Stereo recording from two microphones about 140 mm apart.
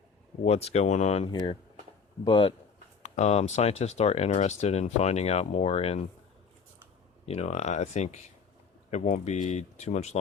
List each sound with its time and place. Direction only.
0.4 s speech: 45° left (ahead or behind)
1.3 s speech: 35° left (ahead or behind)
3.0 s speech: 55° left (ahead or behind)
7.3 s speech: 50° left (ahead or behind)